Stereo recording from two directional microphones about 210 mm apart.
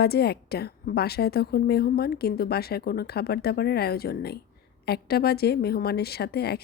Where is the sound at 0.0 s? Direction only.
50° left (ahead or behind).